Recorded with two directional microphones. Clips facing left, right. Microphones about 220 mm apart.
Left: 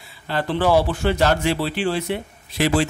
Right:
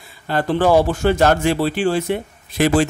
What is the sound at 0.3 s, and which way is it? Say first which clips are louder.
A man's voice: right 3 dB; 45° right (ahead or behind).